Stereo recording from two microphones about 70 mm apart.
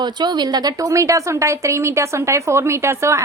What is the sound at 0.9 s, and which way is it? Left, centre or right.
A woman's voice, right.